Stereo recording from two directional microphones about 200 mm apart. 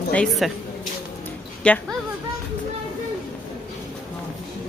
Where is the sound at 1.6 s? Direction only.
5° left (ahead or behind).